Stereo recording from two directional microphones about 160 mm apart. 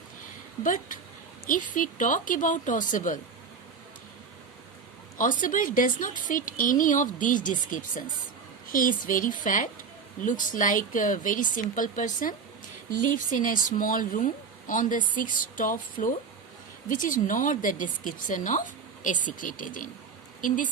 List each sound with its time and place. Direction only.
0.6 s speech: 55° left (ahead or behind)
5.4 s speech: 55° left (ahead or behind)